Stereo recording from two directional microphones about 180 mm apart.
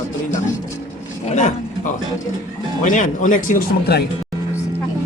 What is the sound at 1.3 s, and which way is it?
Speech, 40° left (ahead or behind).